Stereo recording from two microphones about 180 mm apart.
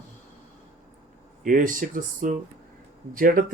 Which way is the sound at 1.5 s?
50° right (ahead or behind).